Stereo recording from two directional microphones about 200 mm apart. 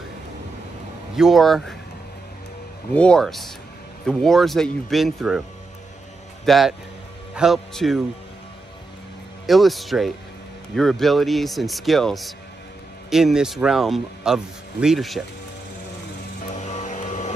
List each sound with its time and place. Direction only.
1.1 s speech: centre (ahead or behind)
2.9 s speech: 5° left (ahead or behind)
6.4 s a man's voice: centre (ahead or behind)
9.5 s speech: centre (ahead or behind)
16.4 s vehicle: 35° left (ahead or behind)